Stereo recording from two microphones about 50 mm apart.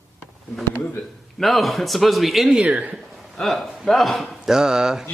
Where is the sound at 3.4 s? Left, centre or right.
Centre.